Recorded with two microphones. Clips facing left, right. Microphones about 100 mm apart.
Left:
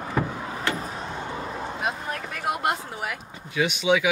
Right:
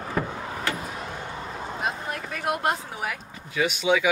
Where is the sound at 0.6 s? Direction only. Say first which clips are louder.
Left 2 dB; 35° left (ahead or behind).